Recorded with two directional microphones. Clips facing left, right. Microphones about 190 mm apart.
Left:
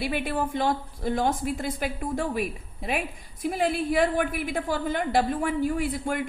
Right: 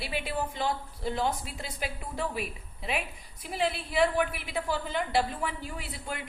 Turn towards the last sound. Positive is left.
turn(degrees=50)  # may be behind; listen again after turning